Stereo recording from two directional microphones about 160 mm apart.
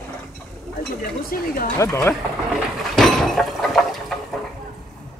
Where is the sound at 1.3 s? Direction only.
65° left (ahead or behind).